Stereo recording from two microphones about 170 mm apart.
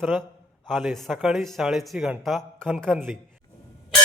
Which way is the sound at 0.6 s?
Centre (ahead or behind).